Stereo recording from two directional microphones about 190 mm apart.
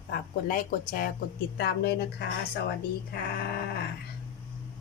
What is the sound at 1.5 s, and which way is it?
Speech, 60° left (ahead or behind).